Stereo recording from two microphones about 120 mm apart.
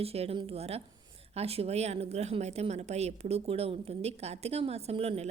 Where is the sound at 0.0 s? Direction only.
55° right (ahead or behind).